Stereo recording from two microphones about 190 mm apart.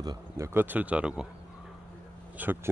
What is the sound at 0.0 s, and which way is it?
Speech, 15° right (ahead or behind).